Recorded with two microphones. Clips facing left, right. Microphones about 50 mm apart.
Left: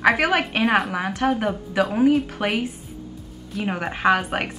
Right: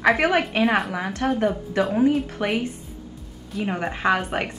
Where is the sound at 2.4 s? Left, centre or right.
Left.